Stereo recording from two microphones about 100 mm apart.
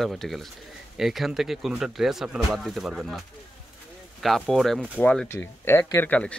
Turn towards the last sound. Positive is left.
turn(degrees=20)  # may be behind; listen again after turning